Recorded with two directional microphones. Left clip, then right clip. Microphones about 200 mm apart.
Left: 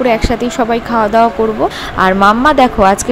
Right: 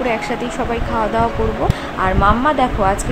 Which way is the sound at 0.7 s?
25° left (ahead or behind).